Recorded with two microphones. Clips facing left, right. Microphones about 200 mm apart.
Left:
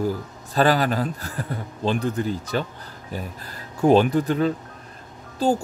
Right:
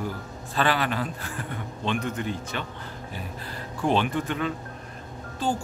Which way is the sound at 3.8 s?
40° left (ahead or behind).